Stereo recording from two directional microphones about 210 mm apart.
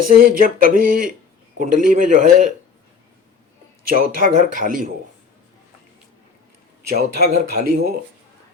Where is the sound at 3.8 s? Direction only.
40° right (ahead or behind).